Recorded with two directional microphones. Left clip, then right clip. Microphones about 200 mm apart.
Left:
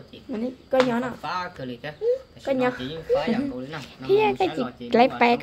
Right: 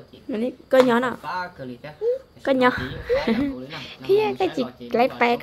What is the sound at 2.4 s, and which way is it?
Speech, 35° right (ahead or behind).